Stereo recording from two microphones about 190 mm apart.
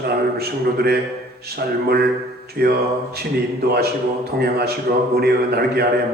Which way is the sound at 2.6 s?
55° right (ahead or behind).